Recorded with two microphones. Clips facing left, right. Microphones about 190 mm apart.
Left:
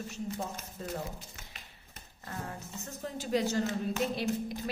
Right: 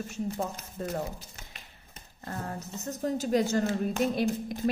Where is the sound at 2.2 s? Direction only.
40° right (ahead or behind).